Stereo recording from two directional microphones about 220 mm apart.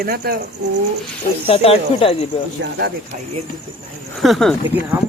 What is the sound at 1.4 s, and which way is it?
Speech, 25° left (ahead or behind).